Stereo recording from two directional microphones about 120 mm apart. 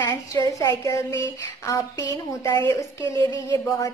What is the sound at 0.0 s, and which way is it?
A woman's voice, 30° left (ahead or behind).